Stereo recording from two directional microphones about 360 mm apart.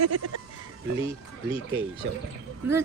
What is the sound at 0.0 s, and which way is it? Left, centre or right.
Goat, right.